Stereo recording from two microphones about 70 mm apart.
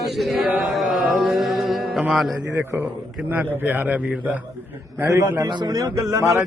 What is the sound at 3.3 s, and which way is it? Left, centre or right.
A man's voice, right.